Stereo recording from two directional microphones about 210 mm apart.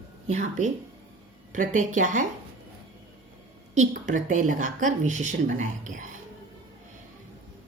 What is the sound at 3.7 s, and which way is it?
A woman's voice, 35° right (ahead or behind).